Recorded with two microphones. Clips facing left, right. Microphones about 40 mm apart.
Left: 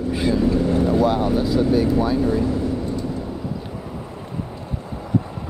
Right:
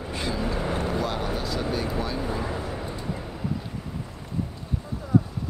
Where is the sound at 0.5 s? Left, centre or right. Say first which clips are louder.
Left 9 dB; right.